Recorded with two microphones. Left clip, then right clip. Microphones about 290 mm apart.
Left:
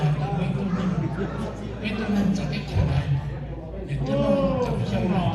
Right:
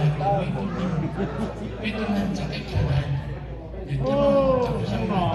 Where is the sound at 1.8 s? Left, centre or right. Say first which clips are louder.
Even; centre.